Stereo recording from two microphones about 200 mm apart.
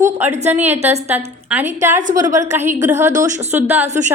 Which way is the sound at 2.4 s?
35° right (ahead or behind).